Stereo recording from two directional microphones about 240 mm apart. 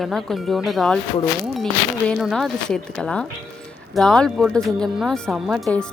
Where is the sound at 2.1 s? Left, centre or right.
Centre.